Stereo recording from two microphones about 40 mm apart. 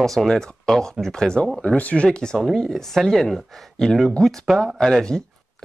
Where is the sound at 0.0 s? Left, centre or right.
Centre.